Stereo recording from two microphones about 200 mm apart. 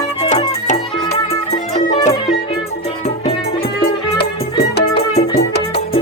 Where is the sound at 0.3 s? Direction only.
35° left (ahead or behind).